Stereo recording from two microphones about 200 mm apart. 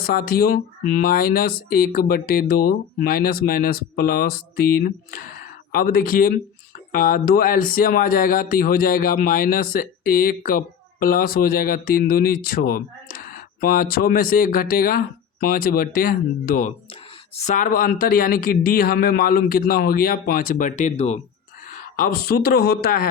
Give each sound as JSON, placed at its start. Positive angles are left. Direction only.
{"t": 0.0, "sound": "speech", "side_deg": 50}
{"t": 21.7, "sound": "speech", "side_deg": 45}